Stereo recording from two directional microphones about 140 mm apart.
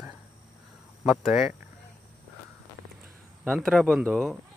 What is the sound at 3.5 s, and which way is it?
Speech, 5° left (ahead or behind).